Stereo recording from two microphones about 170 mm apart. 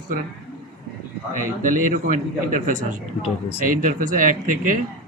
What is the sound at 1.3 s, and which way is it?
A man's voice, 50° right (ahead or behind).